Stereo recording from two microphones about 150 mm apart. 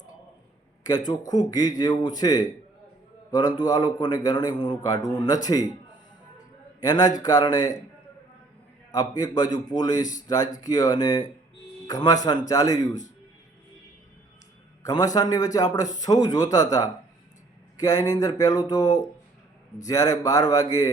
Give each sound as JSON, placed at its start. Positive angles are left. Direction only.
{"t": 0.9, "sound": "a man's voice", "side_deg": 25}
{"t": 6.8, "sound": "a man's voice", "side_deg": 25}
{"t": 8.9, "sound": "a man's voice", "side_deg": 25}
{"t": 14.8, "sound": "a man's voice", "side_deg": 25}